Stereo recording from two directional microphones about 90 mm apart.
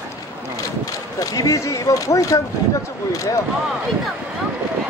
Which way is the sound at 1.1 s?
40° left (ahead or behind).